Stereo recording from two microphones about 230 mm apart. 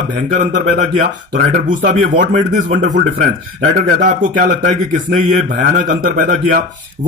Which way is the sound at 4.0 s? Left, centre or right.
Right.